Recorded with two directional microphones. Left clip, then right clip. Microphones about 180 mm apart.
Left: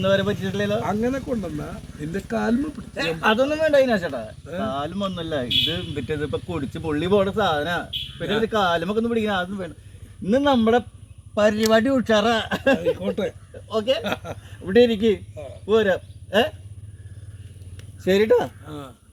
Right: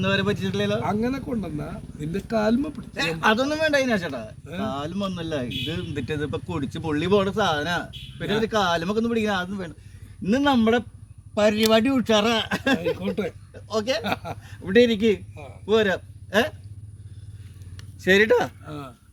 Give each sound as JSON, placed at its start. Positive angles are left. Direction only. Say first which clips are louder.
{"t": 0.0, "sound": "speech", "louder": "left 3 dB", "side_deg": -20}
{"t": 0.8, "sound": "speech", "louder": "left 2 dB", "side_deg": -40}
{"t": 2.9, "sound": "speech", "louder": "left 1 dB", "side_deg": -10}
{"t": 13.0, "sound": "speech", "louder": "left 3 dB", "side_deg": -40}
{"t": 13.5, "sound": "a sound", "louder": "left 3 dB", "side_deg": -10}
{"t": 14.0, "sound": "speech", "louder": "even", "side_deg": -40}
{"t": 14.6, "sound": "speech", "louder": "left 1 dB", "side_deg": -10}
{"t": 18.0, "sound": "speech", "louder": "even", "side_deg": 5}
{"t": 18.6, "sound": "speech", "louder": "even", "side_deg": -35}